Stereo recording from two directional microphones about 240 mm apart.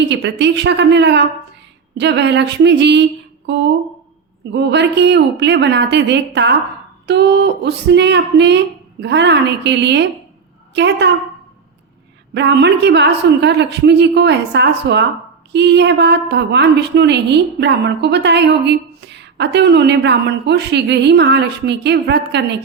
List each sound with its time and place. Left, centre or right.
0.0 s a woman's voice: right
12.3 s a woman's voice: right